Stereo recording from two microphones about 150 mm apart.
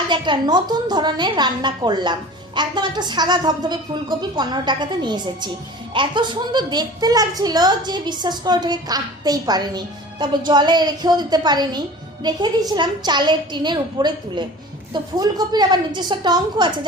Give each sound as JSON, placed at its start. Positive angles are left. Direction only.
{"t": 0.1, "sound": "a woman's voice", "side_deg": -30}